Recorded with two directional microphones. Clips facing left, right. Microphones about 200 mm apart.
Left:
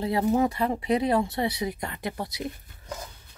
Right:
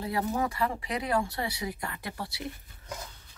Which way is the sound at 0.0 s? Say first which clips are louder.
Left 7 dB; 25° left (ahead or behind).